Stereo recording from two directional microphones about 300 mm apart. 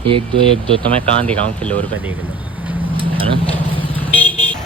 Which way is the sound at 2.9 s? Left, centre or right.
Centre.